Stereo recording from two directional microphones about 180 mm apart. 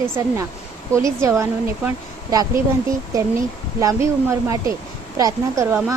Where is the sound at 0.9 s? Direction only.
15° right (ahead or behind).